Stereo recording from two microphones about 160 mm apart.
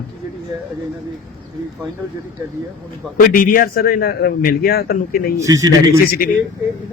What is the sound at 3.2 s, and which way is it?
A man's voice, 60° left (ahead or behind).